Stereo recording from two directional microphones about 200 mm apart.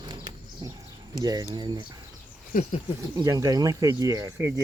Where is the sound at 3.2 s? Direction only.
15° right (ahead or behind).